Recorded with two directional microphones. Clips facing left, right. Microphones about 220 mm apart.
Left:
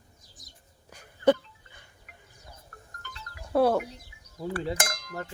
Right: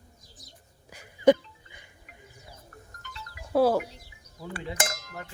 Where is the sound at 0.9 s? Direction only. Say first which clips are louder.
Right 3 dB; 15° right (ahead or behind).